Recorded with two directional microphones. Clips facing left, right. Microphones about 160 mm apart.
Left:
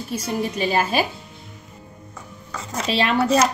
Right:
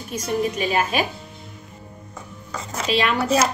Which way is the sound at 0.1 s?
30° left (ahead or behind).